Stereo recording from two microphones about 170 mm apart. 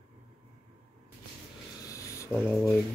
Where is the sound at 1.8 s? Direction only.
20° left (ahead or behind).